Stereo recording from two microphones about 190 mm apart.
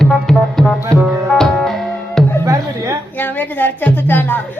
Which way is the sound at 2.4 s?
15° right (ahead or behind).